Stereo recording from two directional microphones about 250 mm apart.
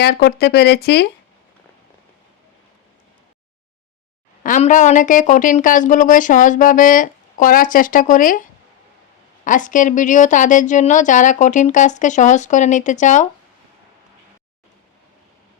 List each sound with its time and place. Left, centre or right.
0.0 s speech: left
4.4 s a woman's voice: left